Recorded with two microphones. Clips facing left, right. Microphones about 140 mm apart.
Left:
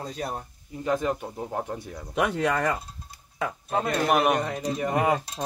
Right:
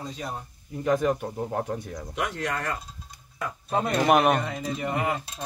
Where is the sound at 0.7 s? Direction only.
Centre (ahead or behind).